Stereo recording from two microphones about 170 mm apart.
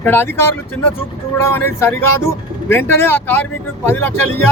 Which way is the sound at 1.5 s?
15° left (ahead or behind).